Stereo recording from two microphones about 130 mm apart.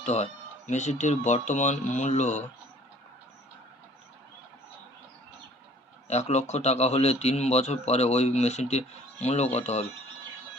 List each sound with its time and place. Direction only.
0.0 s speech: 60° left (ahead or behind)
6.1 s speech: 60° left (ahead or behind)